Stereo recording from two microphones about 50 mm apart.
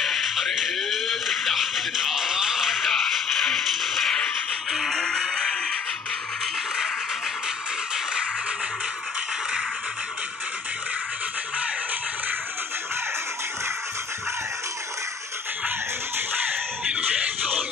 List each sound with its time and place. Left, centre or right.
0.0 s music: centre
2.9 s music: centre
4.9 s music: centre
7.9 s music: centre